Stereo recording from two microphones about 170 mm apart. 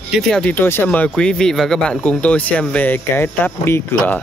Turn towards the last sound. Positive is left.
turn(degrees=15)  # may be behind; listen again after turning